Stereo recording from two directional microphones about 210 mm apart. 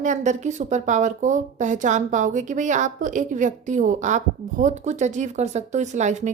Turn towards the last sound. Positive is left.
turn(degrees=-35)  # may be behind; listen again after turning